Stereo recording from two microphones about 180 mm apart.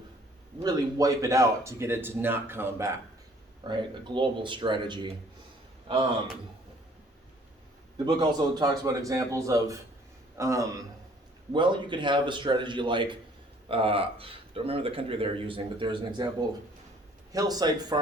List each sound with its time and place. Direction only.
0.6 s a man's voice: 20° right (ahead or behind)
8.0 s a man's voice: 20° right (ahead or behind)
17.3 s a man's voice: 20° right (ahead or behind)